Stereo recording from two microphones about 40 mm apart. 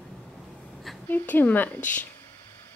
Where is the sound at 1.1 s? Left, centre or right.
Left.